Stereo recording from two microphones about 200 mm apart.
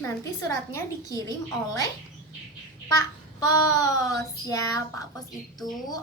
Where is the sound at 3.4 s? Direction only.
15° left (ahead or behind).